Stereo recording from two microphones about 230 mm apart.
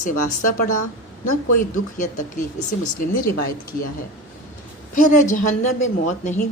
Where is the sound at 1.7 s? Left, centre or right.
Left.